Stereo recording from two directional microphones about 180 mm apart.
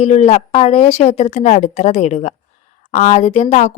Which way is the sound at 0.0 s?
35° left (ahead or behind).